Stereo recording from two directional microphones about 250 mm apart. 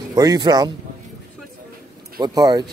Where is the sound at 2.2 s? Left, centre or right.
Centre.